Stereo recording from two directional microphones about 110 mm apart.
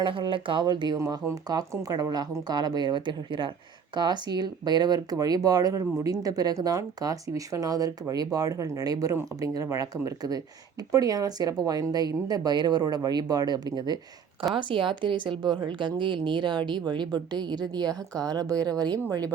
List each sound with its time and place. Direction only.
0.0 s speech: 50° right (ahead or behind)